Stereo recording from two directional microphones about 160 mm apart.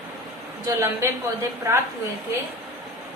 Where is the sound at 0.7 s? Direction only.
20° right (ahead or behind).